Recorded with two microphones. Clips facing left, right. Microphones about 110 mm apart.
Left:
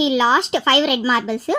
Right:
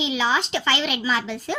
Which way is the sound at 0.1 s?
35° left (ahead or behind).